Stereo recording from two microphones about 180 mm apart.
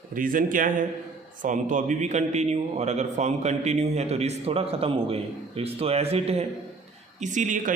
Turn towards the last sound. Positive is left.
turn(degrees=-45)  # may be behind; listen again after turning